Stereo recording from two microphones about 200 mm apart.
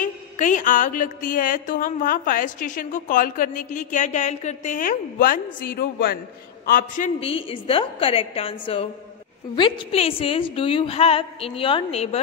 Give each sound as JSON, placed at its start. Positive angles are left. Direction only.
{"t": 0.0, "sound": "music", "side_deg": 40}
{"t": 6.6, "sound": "a woman's voice", "side_deg": 45}